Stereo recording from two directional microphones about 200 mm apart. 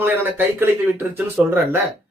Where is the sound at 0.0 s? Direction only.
10° right (ahead or behind).